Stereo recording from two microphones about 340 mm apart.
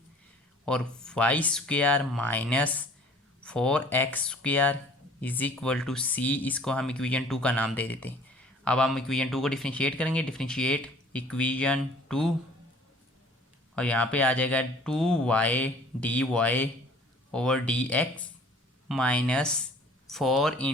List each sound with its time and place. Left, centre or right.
0.6 s speech: centre
13.7 s speech: centre